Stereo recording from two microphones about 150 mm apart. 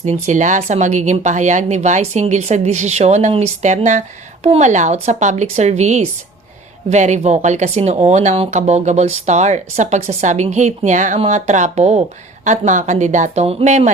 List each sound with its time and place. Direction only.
0.0 s speech: 50° right (ahead or behind)